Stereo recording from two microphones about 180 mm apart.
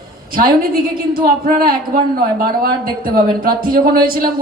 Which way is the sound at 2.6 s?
55° right (ahead or behind).